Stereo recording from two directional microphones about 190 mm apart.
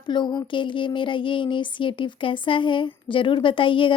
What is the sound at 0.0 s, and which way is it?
A woman's voice, 25° left (ahead or behind).